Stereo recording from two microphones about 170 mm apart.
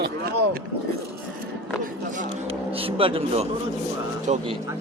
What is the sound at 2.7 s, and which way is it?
A man's voice, 35° right (ahead or behind).